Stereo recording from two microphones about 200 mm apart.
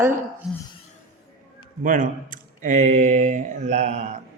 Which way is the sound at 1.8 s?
40° right (ahead or behind).